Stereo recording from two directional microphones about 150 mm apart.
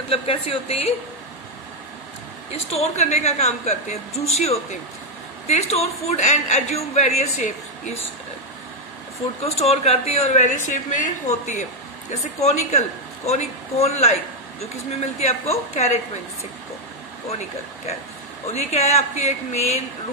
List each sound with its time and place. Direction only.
0.1 s a woman's voice: 40° left (ahead or behind)
2.5 s a woman's voice: 45° left (ahead or behind)
9.4 s a woman's voice: 45° left (ahead or behind)
15.1 s a woman's voice: 45° left (ahead or behind)
18.5 s a woman's voice: 45° left (ahead or behind)